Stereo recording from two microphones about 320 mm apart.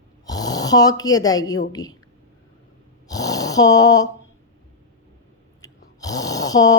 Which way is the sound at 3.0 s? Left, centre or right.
Centre.